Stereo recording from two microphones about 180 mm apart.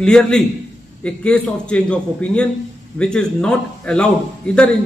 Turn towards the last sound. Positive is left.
turn(degrees=5)  # may be behind; listen again after turning